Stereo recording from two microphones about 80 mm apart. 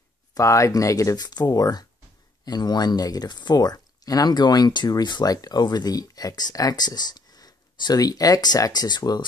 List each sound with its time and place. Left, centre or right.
0.3 s speech: left
1.1 s speech: left